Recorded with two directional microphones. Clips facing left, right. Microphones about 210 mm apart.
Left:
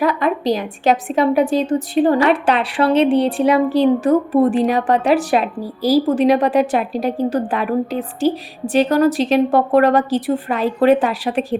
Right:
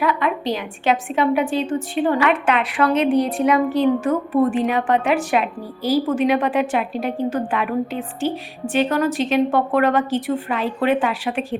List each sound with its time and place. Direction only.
0.0 s a woman's voice: 40° left (ahead or behind)